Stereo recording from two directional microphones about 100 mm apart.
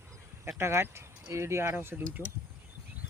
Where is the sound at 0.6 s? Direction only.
25° right (ahead or behind).